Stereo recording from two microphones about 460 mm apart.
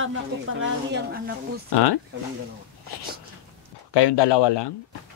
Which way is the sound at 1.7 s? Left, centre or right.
Left.